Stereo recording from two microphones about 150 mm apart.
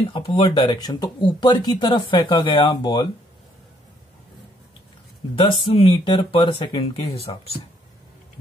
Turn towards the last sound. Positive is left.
turn(degrees=40)  # may be behind; listen again after turning